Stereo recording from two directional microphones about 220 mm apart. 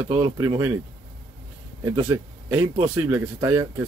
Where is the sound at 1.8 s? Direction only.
15° right (ahead or behind).